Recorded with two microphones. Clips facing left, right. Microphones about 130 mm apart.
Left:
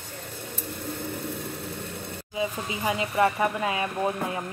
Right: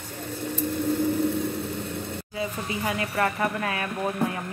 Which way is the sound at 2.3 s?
20° left (ahead or behind).